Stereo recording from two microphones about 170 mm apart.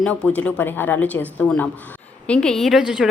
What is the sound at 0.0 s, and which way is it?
A woman's voice, 5° left (ahead or behind).